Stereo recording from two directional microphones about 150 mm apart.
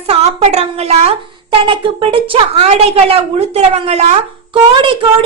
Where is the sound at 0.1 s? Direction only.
45° right (ahead or behind).